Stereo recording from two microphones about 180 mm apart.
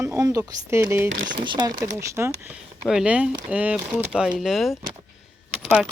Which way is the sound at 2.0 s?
15° right (ahead or behind).